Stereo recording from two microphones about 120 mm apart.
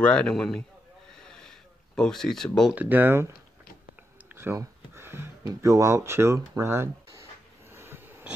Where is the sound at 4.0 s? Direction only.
15° right (ahead or behind).